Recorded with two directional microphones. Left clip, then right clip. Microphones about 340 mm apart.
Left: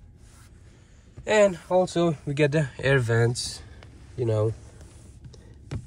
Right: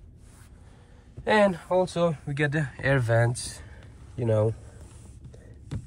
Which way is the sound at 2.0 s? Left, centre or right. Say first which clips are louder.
Left 2 dB; centre.